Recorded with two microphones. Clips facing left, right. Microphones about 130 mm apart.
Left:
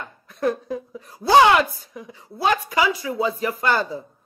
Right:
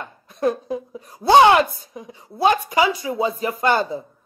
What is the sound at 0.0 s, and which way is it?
A woman's voice, 20° right (ahead or behind).